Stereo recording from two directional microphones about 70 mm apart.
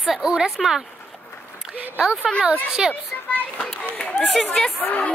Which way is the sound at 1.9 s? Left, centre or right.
Centre.